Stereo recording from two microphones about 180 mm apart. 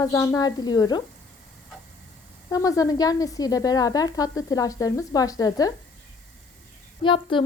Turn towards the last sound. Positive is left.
turn(degrees=25)  # may be behind; listen again after turning